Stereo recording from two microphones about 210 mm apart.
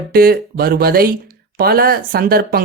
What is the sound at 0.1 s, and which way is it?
Speech, 45° right (ahead or behind).